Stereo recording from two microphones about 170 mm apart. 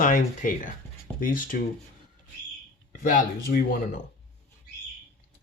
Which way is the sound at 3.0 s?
55° left (ahead or behind).